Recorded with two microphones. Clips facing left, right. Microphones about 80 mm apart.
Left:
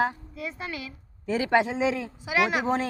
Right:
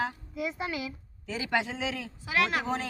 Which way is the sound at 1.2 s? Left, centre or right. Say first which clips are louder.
Left 7 dB; left.